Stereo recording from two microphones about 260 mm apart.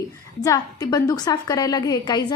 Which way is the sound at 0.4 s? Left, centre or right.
Centre.